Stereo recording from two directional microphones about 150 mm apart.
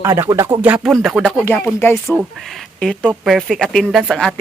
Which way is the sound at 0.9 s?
Centre (ahead or behind).